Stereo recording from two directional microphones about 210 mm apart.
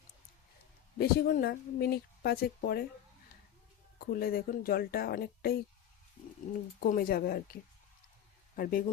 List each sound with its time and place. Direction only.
0.9 s speech: 45° left (ahead or behind)
3.9 s speech: 45° left (ahead or behind)
6.7 s speech: 45° left (ahead or behind)
8.5 s a man's voice: 45° left (ahead or behind)